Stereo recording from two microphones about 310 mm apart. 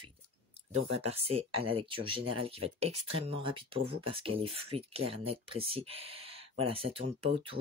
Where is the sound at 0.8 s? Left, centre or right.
Centre.